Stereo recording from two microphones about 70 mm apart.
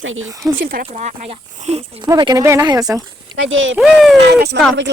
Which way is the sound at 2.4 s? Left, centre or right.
Right.